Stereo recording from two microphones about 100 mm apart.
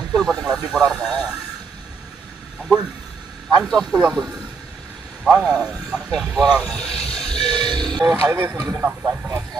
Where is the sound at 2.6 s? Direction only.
10° right (ahead or behind).